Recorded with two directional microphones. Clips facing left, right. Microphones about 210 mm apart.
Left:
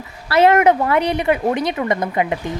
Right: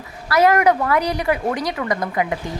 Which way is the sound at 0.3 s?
25° left (ahead or behind).